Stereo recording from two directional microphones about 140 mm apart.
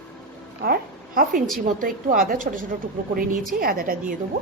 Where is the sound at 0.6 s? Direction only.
90° right.